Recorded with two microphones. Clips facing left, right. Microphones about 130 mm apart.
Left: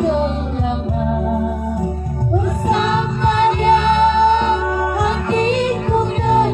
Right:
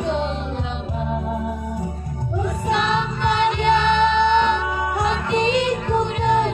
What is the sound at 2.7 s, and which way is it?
Music, 40° left (ahead or behind).